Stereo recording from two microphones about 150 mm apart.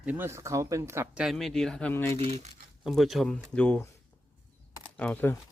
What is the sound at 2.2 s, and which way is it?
Coin, 45° right (ahead or behind).